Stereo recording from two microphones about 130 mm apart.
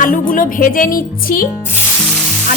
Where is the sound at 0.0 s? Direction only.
90° left.